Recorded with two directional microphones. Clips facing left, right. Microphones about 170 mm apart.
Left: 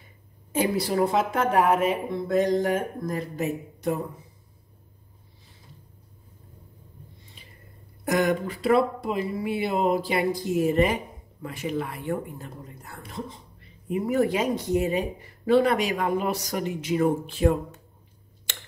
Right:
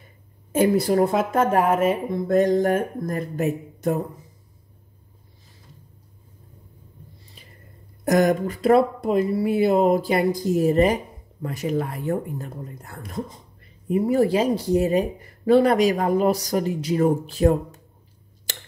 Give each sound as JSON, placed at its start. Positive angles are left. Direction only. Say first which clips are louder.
{"t": 0.5, "sound": "speech", "louder": "right 6 dB", "side_deg": -50}
{"t": 8.0, "sound": "speech", "louder": "right 5 dB", "side_deg": -40}
{"t": 13.8, "sound": "speech", "louder": "right 4 dB", "side_deg": -35}
{"t": 18.5, "sound": "tick-tock", "louder": "right 3 dB", "side_deg": -35}